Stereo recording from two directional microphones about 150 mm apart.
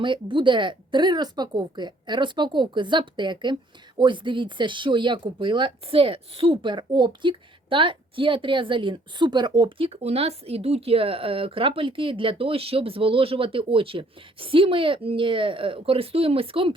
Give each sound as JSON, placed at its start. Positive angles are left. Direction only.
{"t": 0.0, "sound": "speech", "side_deg": -35}